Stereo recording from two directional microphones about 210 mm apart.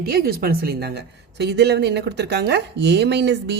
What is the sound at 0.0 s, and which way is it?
A woman's voice, 45° right (ahead or behind).